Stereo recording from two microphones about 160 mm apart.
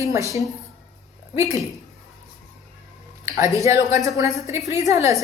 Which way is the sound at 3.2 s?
20° right (ahead or behind).